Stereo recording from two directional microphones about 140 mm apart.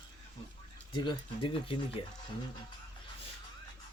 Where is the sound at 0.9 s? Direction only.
35° left (ahead or behind).